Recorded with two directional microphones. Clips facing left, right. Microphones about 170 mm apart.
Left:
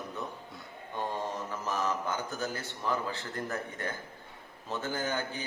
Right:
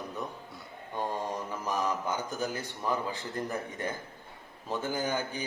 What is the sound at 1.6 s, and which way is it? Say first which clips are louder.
Speech: right 1 dB; 15° right (ahead or behind).